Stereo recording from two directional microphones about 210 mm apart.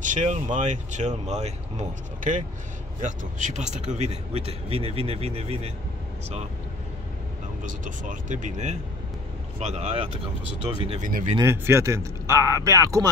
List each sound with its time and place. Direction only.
0.0 s a man's voice: 35° right (ahead or behind)
7.6 s speech: 40° right (ahead or behind)
11.3 s speech: 10° right (ahead or behind)